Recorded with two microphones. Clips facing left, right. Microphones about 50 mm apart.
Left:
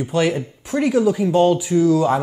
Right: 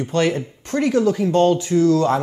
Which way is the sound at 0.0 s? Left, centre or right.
Centre.